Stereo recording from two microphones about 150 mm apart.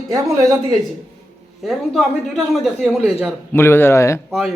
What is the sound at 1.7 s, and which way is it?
A woman's voice, centre (ahead or behind).